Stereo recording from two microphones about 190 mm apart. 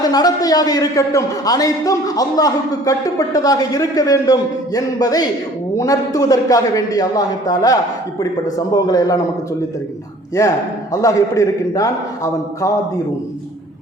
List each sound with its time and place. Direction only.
0.0 s a man's voice: 20° left (ahead or behind)
10.4 s a man's voice: 15° left (ahead or behind)